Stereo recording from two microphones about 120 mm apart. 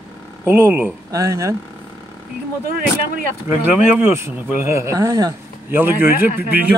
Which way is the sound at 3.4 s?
15° right (ahead or behind).